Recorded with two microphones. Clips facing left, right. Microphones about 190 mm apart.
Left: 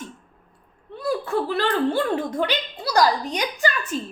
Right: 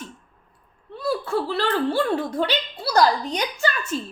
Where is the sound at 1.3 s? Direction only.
20° left (ahead or behind).